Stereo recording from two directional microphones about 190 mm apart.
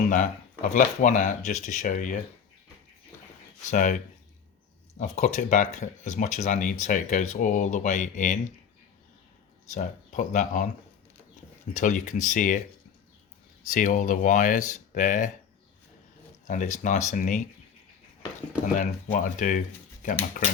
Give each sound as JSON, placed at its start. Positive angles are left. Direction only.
{"t": 0.7, "sound": "speech", "side_deg": 40}
{"t": 3.7, "sound": "speech", "side_deg": 45}
{"t": 9.6, "sound": "speech", "side_deg": 40}
{"t": 11.7, "sound": "speech", "side_deg": 40}
{"t": 13.7, "sound": "speech", "side_deg": 45}
{"t": 16.5, "sound": "speech", "side_deg": 40}
{"t": 18.7, "sound": "speech", "side_deg": 40}